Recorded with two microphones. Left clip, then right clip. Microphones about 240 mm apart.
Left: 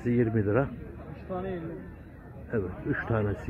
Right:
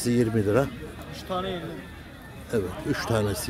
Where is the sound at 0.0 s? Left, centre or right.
Centre.